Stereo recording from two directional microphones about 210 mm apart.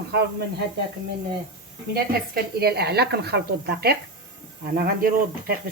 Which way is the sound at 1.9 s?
50° right (ahead or behind).